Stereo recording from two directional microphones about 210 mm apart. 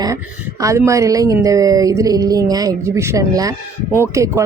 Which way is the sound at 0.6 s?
15° right (ahead or behind).